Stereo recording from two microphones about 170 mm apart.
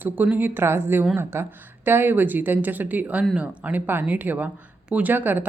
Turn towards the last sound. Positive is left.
turn(degrees=-10)  # may be behind; listen again after turning